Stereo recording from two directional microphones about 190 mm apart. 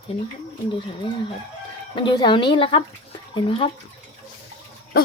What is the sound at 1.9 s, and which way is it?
A woman's voice, 25° left (ahead or behind).